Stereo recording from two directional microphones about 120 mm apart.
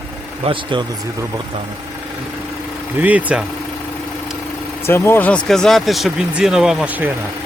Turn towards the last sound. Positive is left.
turn(degrees=-15)  # may be behind; listen again after turning